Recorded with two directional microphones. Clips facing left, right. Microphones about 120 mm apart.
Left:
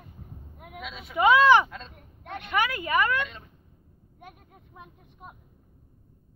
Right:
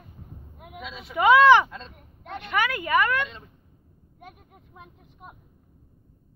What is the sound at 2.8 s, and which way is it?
Speech, 25° left (ahead or behind).